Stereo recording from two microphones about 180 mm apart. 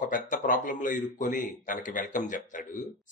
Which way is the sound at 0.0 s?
45° left (ahead or behind).